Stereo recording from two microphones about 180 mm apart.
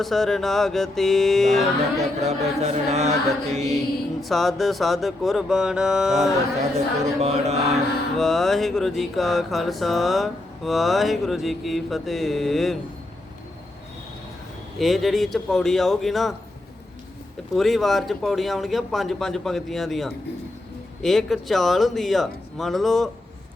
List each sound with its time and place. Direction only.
0.0 s music: centre (ahead or behind)
2.2 s chant: 35° right (ahead or behind)
4.2 s music: centre (ahead or behind)
7.2 s chant: 35° right (ahead or behind)
8.1 s music: centre (ahead or behind)
14.8 s music: centre (ahead or behind)
17.5 s music: centre (ahead or behind)